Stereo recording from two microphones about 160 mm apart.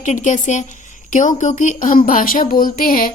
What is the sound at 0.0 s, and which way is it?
Speech, 50° left (ahead or behind).